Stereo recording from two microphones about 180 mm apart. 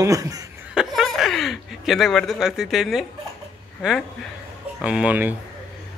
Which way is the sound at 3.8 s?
Centre (ahead or behind).